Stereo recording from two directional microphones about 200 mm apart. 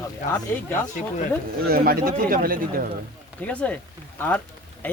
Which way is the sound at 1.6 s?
50° right (ahead or behind).